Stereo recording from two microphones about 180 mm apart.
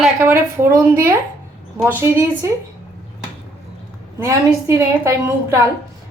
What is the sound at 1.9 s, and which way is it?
Speech, 15° right (ahead or behind).